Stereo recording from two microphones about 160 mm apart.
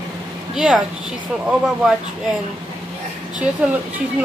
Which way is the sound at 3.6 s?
5° right (ahead or behind).